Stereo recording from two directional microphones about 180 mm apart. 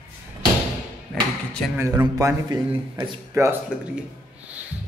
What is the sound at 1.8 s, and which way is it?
Speech, 15° right (ahead or behind).